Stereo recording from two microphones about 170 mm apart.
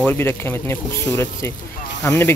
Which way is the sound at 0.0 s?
10° left (ahead or behind).